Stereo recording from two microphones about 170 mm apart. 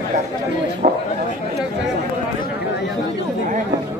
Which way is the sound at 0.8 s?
55° right (ahead or behind).